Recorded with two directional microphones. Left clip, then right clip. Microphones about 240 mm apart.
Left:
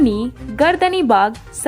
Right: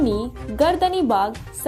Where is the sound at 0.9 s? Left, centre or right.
Left.